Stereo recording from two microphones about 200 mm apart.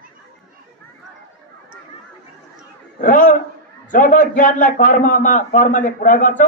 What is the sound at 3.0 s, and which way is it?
A man's voice, 45° left (ahead or behind).